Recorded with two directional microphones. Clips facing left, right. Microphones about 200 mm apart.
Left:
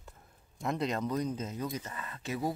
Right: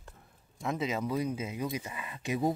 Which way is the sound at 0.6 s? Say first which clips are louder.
Even; centre (ahead or behind).